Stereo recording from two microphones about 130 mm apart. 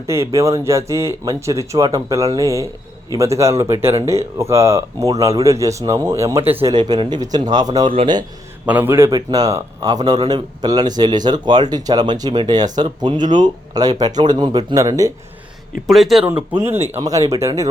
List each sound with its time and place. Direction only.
0.1 s speech: 20° right (ahead or behind)
6.7 s a man's voice: 35° right (ahead or behind)
8.6 s a man's voice: 15° right (ahead or behind)
15.9 s speech: centre (ahead or behind)
16.2 s speech: 15° right (ahead or behind)